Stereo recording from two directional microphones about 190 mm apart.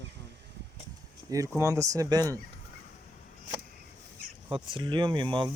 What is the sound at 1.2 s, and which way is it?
Speech, 20° right (ahead or behind).